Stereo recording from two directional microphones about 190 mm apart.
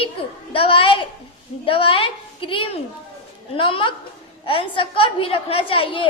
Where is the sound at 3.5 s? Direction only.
25° left (ahead or behind).